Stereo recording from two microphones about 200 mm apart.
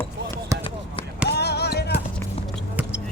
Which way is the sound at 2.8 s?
10° right (ahead or behind).